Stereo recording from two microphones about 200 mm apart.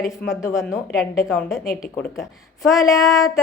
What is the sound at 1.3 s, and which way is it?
A woman's voice, centre (ahead or behind).